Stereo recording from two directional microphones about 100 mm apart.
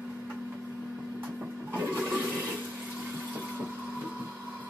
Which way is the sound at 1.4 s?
15° right (ahead or behind).